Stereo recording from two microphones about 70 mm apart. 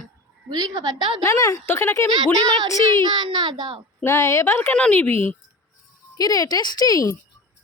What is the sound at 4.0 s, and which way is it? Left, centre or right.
Speech, left.